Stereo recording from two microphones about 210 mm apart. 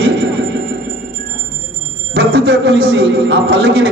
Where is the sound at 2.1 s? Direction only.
55° right (ahead or behind).